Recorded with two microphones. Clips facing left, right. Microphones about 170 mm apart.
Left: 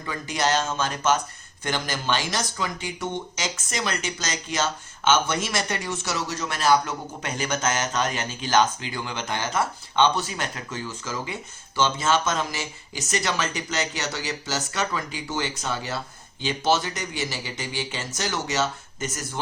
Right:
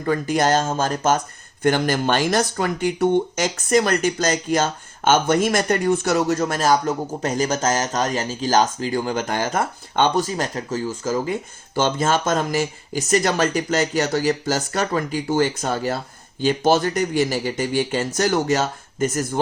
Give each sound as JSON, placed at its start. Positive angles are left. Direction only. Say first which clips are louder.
{"t": 0.0, "sound": "speech", "louder": "right 7 dB", "side_deg": -50}